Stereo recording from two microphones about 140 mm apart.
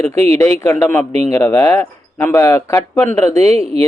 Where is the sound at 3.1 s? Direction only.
55° right (ahead or behind).